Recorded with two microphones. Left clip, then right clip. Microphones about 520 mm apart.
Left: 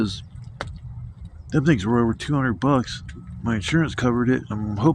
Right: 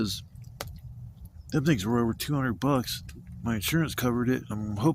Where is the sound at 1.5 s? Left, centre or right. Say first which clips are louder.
Left 6 dB; right.